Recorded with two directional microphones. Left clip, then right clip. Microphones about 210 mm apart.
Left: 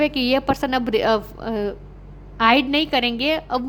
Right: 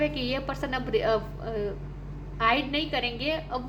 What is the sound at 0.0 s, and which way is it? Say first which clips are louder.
A woman's voice: left 9 dB; 50° left (ahead or behind).